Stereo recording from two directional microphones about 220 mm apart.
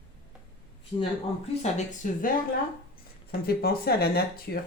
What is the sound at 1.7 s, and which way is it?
Speech, 35° left (ahead or behind).